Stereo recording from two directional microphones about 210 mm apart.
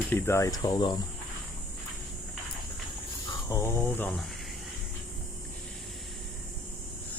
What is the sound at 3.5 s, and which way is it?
Speech, 10° left (ahead or behind).